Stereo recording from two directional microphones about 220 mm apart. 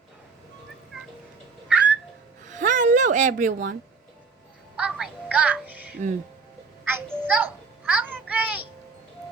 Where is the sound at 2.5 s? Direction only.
35° right (ahead or behind).